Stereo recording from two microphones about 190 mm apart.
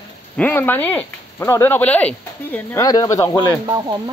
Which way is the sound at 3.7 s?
20° right (ahead or behind).